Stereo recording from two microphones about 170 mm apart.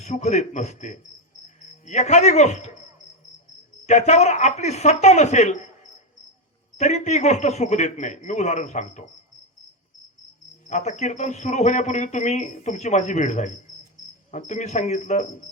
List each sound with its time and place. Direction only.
0.0 s a man's voice: 40° left (ahead or behind)
3.8 s speech: 40° left (ahead or behind)
6.7 s a man's voice: 40° left (ahead or behind)
10.7 s a man's voice: 45° left (ahead or behind)